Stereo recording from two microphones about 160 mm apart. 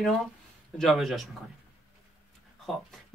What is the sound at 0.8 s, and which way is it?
Speech, centre (ahead or behind).